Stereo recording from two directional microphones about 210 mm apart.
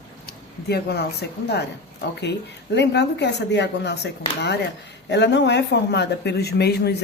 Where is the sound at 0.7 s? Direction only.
50° left (ahead or behind).